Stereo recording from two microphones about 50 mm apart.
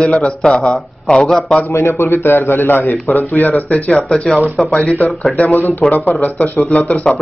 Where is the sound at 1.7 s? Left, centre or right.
Left.